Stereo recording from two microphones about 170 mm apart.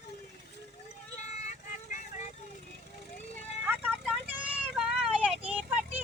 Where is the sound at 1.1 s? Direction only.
45° left (ahead or behind).